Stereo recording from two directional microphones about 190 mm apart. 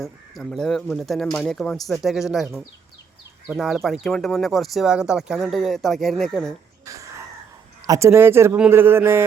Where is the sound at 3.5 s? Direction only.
Centre (ahead or behind).